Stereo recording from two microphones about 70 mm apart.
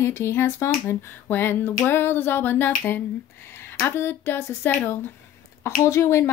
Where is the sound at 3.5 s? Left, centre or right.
Left.